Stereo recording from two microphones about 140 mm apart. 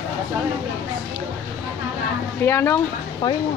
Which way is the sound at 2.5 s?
20° left (ahead or behind).